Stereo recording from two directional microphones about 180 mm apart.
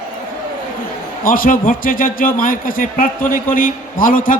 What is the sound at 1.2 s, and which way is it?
A man's voice, 50° left (ahead or behind).